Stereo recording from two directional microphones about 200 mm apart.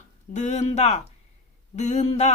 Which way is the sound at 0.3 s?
35° left (ahead or behind).